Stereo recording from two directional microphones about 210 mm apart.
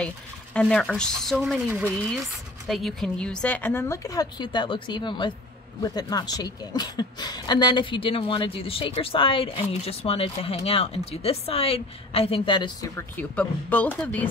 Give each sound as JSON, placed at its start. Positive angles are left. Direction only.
{"t": 0.6, "sound": "a woman's voice", "side_deg": 5}